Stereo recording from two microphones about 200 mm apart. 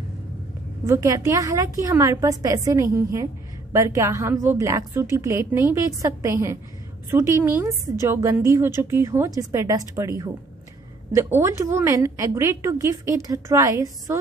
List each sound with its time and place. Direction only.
0.8 s a woman's voice: 15° right (ahead or behind)